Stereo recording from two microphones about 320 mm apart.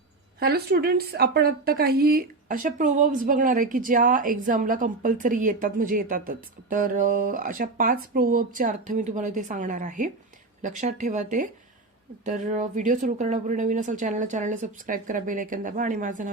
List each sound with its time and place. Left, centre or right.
0.3 s a woman's voice: right